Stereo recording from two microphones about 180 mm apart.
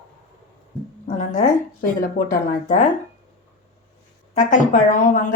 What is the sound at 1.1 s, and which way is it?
A woman's voice, 45° left (ahead or behind).